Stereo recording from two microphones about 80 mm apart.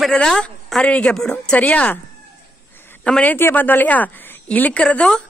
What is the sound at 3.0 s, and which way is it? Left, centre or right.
Speech, centre.